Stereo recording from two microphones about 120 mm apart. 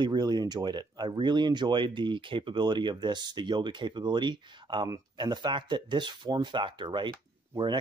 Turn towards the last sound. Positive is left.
turn(degrees=-40)  # may be behind; listen again after turning